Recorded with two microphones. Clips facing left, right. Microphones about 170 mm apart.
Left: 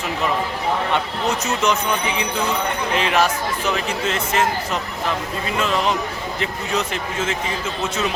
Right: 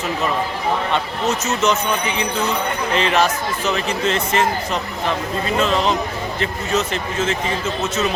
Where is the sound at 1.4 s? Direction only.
10° left (ahead or behind).